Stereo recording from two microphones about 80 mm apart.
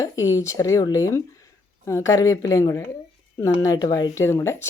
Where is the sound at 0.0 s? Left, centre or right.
Left.